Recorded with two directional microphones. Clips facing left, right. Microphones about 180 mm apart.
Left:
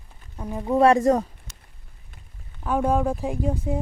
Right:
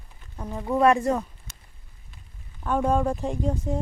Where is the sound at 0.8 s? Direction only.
40° left (ahead or behind).